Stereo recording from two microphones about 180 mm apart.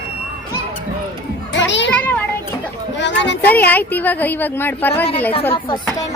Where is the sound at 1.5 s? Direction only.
85° left.